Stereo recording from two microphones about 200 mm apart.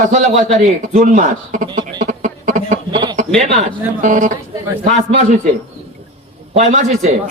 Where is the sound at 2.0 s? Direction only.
40° right (ahead or behind).